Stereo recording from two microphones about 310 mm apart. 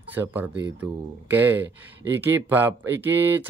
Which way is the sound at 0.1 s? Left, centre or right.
Centre.